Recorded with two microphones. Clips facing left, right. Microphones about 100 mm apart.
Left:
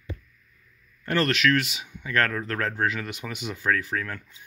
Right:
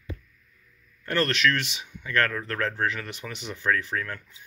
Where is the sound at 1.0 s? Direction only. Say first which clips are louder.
Left 1 dB; 15° left (ahead or behind).